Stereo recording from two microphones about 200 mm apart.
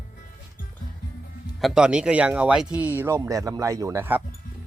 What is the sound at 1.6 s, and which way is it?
Speech, 5° right (ahead or behind).